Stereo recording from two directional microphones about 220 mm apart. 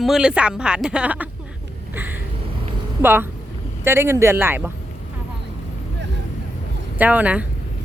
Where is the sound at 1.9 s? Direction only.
10° right (ahead or behind).